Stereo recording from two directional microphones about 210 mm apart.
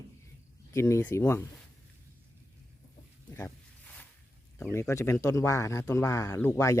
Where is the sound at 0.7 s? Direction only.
15° left (ahead or behind).